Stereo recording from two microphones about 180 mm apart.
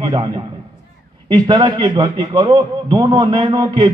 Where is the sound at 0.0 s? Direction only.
25° right (ahead or behind).